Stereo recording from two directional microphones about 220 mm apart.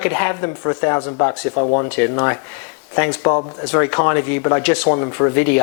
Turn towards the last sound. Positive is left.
turn(degrees=15)  # may be behind; listen again after turning